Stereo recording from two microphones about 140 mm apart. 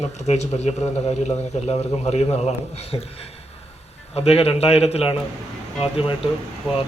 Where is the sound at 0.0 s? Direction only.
55° left (ahead or behind).